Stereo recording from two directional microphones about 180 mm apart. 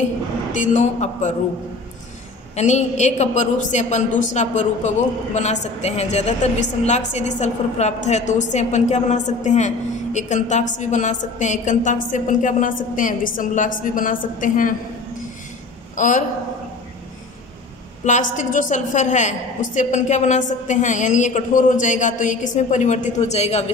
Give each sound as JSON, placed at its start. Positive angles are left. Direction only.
{"t": 0.5, "sound": "a woman's voice", "side_deg": 45}
{"t": 2.5, "sound": "a woman's voice", "side_deg": 40}
{"t": 16.0, "sound": "a woman's voice", "side_deg": 45}
{"t": 18.0, "sound": "a woman's voice", "side_deg": 45}